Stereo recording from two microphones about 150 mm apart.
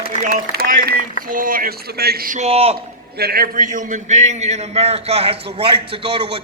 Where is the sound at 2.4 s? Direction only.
45° right (ahead or behind).